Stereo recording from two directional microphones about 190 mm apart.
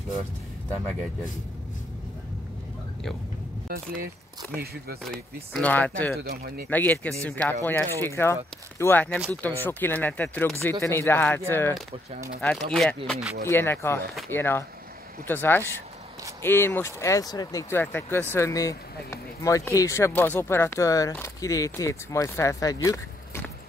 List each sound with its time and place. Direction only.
3.6 s speech: 50° right (ahead or behind)
5.0 s speech: 5° left (ahead or behind)
6.1 s speech: 55° right (ahead or behind)
6.7 s speech: 10° left (ahead or behind)
13.5 s speech: 10° left (ahead or behind)